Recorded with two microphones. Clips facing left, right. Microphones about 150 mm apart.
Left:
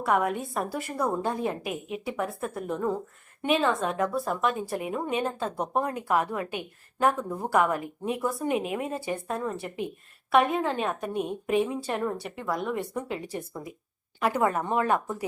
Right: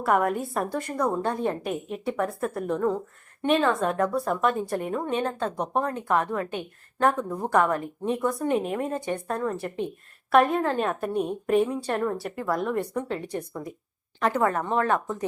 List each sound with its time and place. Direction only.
0.0 s a woman's voice: centre (ahead or behind)